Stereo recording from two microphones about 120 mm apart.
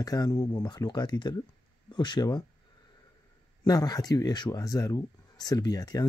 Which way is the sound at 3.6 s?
35° left (ahead or behind).